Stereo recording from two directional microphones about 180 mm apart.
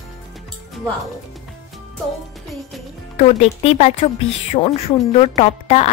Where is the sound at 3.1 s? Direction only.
35° left (ahead or behind).